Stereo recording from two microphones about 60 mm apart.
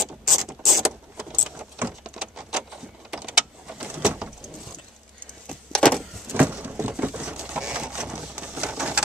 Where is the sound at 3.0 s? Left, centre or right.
Centre.